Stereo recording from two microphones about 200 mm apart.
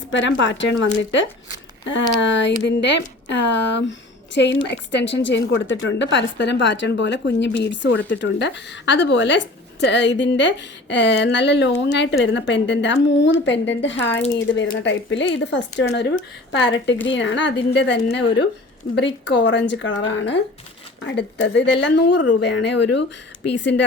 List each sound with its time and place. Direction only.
0.1 s a woman's voice: 65° left (ahead or behind)
1.8 s a woman's voice: 65° left (ahead or behind)